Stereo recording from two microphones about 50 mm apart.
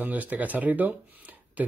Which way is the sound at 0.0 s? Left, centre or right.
Right.